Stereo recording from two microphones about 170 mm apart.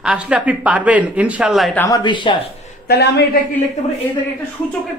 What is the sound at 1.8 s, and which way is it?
Speech, 25° left (ahead or behind).